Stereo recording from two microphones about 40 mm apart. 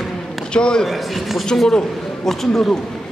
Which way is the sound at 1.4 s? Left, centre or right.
Centre.